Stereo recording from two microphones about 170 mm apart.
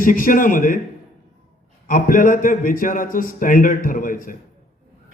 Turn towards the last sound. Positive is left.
turn(degrees=55)  # may be behind; listen again after turning